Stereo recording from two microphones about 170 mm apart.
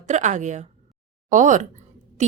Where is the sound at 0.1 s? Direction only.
45° right (ahead or behind).